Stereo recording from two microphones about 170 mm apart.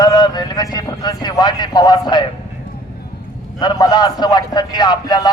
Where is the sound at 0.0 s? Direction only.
25° left (ahead or behind).